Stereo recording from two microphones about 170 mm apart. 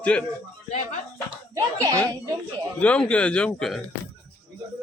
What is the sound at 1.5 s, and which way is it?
Speech, 20° right (ahead or behind).